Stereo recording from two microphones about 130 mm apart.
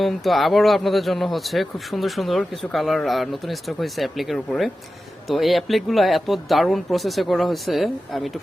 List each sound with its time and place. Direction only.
0.0 s speech: centre (ahead or behind)